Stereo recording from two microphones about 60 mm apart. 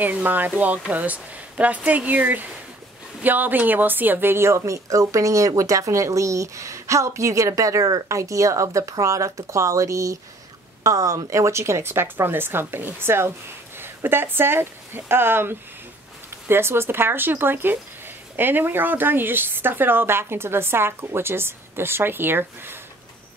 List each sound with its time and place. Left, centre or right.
0.0 s a woman's voice: right